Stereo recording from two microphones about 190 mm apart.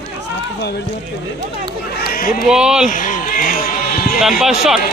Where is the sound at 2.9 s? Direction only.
45° left (ahead or behind).